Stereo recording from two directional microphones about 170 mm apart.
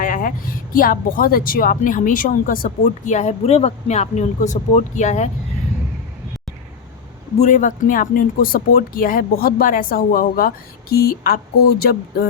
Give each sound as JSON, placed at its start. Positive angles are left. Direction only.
{"t": 0.0, "sound": "speech", "side_deg": 50}
{"t": 7.3, "sound": "speech", "side_deg": 45}